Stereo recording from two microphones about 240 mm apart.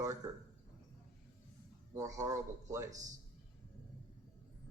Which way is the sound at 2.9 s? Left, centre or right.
Right.